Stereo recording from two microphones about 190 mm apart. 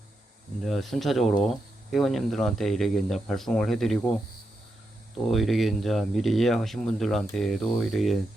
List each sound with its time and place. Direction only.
0.6 s speech: centre (ahead or behind)
5.1 s speech: centre (ahead or behind)